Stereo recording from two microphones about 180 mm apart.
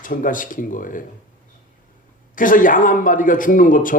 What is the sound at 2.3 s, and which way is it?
A man's voice, 50° left (ahead or behind).